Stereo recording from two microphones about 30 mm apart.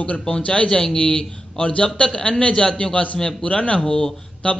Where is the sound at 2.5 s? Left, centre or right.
Left.